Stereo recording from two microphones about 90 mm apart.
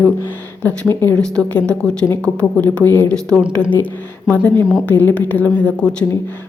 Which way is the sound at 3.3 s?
10° left (ahead or behind).